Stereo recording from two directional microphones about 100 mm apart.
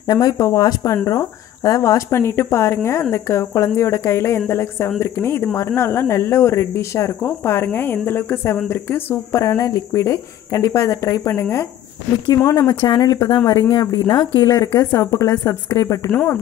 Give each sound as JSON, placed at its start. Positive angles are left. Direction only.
{"t": 0.0, "sound": "speech", "side_deg": 40}
{"t": 12.4, "sound": "speech", "side_deg": 30}
{"t": 12.8, "sound": "speech", "side_deg": 40}
{"t": 13.3, "sound": "speech", "side_deg": 25}
{"t": 13.6, "sound": "speech", "side_deg": 45}